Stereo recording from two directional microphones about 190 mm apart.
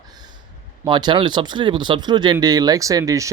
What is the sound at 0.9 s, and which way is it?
Speech, 25° right (ahead or behind).